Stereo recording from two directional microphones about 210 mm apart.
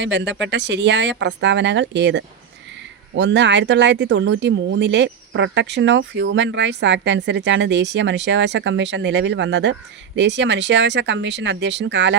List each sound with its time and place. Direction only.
0.0 s speech: 60° right (ahead or behind)